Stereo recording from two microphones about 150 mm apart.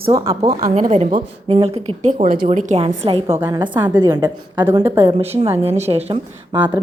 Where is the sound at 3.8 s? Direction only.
30° right (ahead or behind).